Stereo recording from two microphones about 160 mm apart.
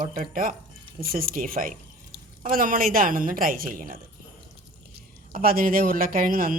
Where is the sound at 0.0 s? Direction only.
60° right (ahead or behind).